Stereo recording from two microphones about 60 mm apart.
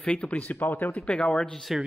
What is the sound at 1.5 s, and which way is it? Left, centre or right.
Speech, centre.